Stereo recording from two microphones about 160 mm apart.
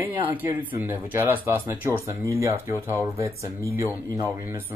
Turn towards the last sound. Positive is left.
turn(degrees=-15)  # may be behind; listen again after turning